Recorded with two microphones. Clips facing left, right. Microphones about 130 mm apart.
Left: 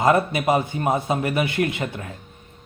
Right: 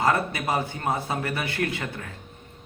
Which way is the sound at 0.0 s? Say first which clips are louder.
Left 5 dB; 20° left (ahead or behind).